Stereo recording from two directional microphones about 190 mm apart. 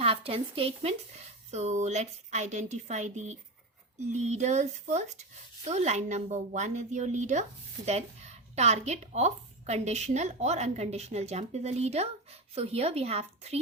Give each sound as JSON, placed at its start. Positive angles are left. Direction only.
{"t": 0.0, "sound": "a woman's voice", "side_deg": -30}